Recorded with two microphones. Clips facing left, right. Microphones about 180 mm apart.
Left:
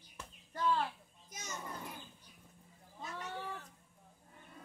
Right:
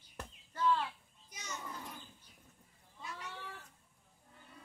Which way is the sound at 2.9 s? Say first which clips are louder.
Left 4 dB; 40° left (ahead or behind).